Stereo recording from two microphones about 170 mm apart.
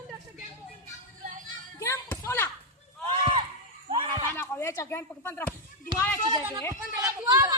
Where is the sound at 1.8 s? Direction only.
15° left (ahead or behind).